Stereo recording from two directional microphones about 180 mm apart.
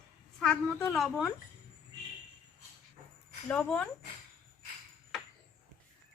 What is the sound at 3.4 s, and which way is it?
Speech, 5° left (ahead or behind).